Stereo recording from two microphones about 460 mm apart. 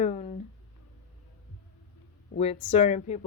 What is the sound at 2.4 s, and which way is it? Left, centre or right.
Speech, centre.